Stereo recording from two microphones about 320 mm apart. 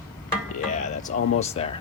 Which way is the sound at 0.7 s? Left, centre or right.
Left.